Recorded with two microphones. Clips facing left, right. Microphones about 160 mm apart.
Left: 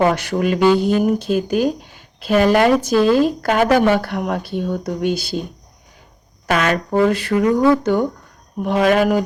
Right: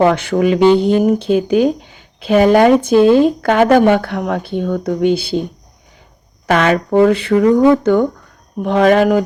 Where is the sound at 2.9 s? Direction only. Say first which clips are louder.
Right 7 dB; 25° right (ahead or behind).